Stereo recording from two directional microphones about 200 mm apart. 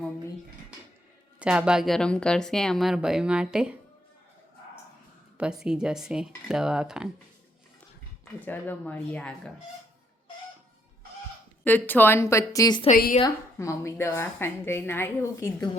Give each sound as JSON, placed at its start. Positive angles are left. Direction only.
{"t": 1.4, "sound": "a woman's voice", "side_deg": -5}
{"t": 5.4, "sound": "a woman's voice", "side_deg": -5}
{"t": 8.2, "sound": "a woman's voice", "side_deg": 10}
{"t": 11.6, "sound": "a woman's voice", "side_deg": 10}
{"t": 12.9, "sound": "a woman's voice", "side_deg": 45}
{"t": 13.1, "sound": "a woman's voice", "side_deg": 20}